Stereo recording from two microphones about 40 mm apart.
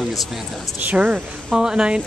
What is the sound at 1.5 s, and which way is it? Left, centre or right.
Speech, centre.